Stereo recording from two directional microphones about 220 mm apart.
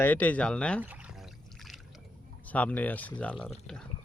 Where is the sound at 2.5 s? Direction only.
5° left (ahead or behind).